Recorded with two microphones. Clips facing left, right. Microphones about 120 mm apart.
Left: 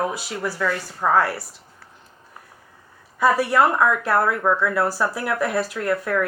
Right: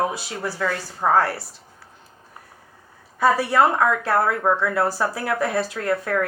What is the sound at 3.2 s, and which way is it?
Speech, 30° right (ahead or behind).